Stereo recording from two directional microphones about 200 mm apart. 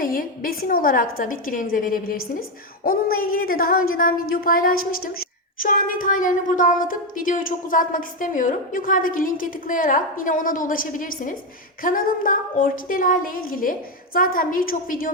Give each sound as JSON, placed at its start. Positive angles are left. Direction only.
{"t": 0.0, "sound": "speech", "side_deg": 45}